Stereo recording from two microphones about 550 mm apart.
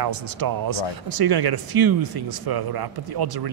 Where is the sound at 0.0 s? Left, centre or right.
Right.